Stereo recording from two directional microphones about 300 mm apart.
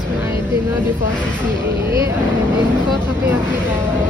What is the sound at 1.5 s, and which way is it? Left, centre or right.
Speech, centre.